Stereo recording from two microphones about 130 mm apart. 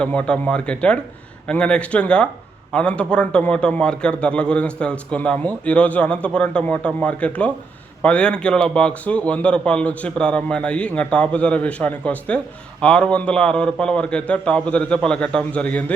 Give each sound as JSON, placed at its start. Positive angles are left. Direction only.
{"t": 0.0, "sound": "a man's voice", "side_deg": 10}